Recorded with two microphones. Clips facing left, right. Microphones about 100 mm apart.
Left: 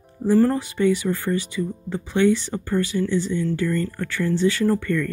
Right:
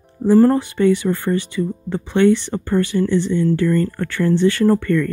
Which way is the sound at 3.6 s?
55° right (ahead or behind).